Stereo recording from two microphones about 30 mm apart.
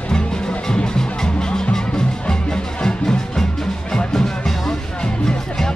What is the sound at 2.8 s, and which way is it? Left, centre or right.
Music, left.